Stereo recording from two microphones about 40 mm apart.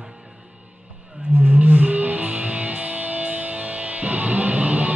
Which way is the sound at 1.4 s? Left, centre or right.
Right.